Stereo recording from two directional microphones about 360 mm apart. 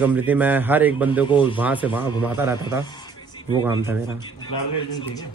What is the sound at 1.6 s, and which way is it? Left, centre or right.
A man's voice, centre.